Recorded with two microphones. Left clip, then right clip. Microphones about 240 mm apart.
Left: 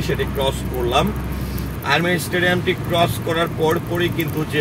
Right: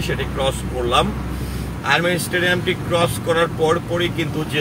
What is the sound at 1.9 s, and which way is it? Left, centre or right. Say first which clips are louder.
Speech: right 1 dB; right.